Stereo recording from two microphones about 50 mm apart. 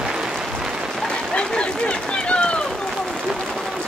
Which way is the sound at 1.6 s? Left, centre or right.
Left.